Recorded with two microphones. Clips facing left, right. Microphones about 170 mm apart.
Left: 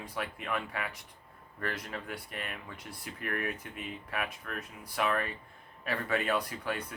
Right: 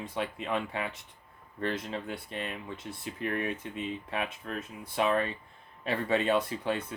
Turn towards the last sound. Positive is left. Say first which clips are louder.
# right 4 dB
turn(degrees=-25)  # may be behind; listen again after turning